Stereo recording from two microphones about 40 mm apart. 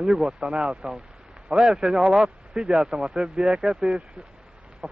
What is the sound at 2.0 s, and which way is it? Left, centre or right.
Speech, centre.